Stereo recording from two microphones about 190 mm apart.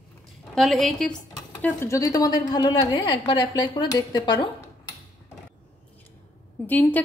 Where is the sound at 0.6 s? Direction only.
Centre (ahead or behind); by 4.5 s 20° left (ahead or behind).